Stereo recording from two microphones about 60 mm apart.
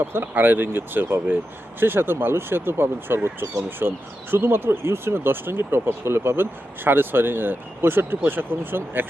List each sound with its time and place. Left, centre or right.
0.0 s speech: right
3.4 s speech: right
3.8 s speech: right